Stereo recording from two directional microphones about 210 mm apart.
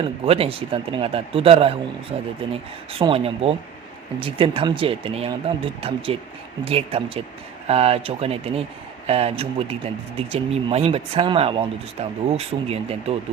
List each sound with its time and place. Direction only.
0.3 s speech: 25° right (ahead or behind)